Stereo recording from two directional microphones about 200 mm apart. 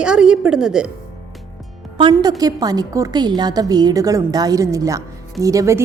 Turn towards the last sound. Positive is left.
turn(degrees=-15)  # may be behind; listen again after turning